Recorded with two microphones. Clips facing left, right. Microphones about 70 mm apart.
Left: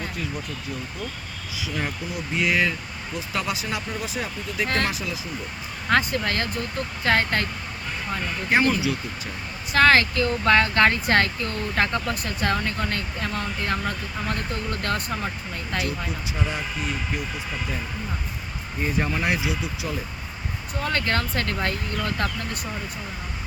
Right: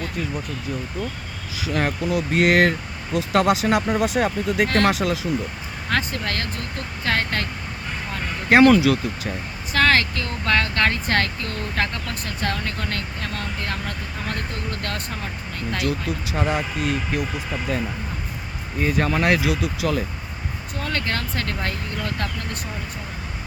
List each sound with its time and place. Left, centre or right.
1.7 s speech: right
5.9 s speech: centre
8.4 s speech: right
9.7 s speech: centre
15.8 s speech: right
18.8 s speech: right
20.8 s speech: centre